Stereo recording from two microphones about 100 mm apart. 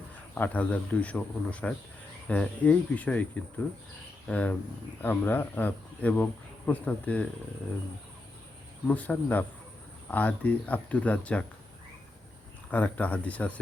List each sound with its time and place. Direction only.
0.3 s speech: 15° left (ahead or behind)
4.3 s speech: 15° left (ahead or behind)
8.9 s speech: 15° left (ahead or behind)
12.7 s speech: 15° left (ahead or behind)